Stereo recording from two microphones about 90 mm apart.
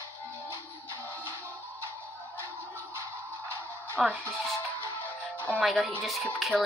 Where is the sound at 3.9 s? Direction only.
Centre (ahead or behind).